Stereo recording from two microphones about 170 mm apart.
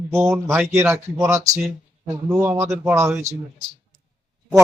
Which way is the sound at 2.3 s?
5° right (ahead or behind).